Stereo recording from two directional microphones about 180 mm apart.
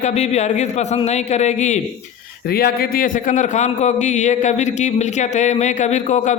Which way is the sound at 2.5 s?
60° left (ahead or behind).